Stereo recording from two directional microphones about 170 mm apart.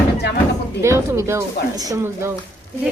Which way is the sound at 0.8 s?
15° right (ahead or behind).